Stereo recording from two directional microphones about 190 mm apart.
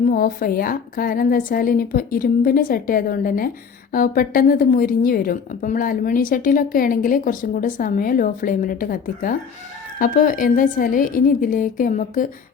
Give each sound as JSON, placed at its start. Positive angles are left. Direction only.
{"t": 0.0, "sound": "a woman's voice", "side_deg": 50}